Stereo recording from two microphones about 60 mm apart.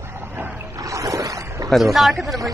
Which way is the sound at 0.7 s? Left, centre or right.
Right.